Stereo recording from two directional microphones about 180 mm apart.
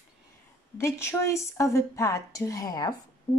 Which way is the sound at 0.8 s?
15° left (ahead or behind).